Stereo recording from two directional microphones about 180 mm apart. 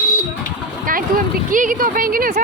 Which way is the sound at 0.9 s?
50° right (ahead or behind).